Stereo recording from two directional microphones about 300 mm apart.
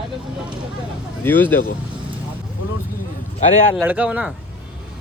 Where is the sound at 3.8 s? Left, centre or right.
Centre.